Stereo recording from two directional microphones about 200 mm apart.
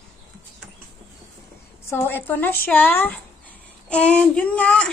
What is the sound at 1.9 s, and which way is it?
A woman's voice, 10° left (ahead or behind).